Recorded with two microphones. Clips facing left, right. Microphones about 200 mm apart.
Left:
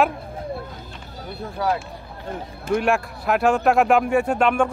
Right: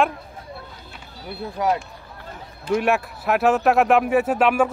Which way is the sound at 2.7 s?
Centre (ahead or behind).